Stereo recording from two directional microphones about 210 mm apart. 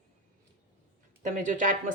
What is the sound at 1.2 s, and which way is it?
Speech, 40° right (ahead or behind).